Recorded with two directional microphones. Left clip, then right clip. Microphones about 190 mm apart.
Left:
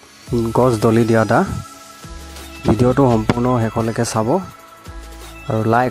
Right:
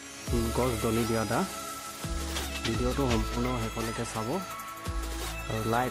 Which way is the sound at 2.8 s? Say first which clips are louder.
Left 16 dB; 50° left (ahead or behind).